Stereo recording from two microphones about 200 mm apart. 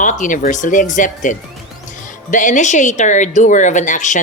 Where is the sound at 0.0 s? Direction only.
40° left (ahead or behind).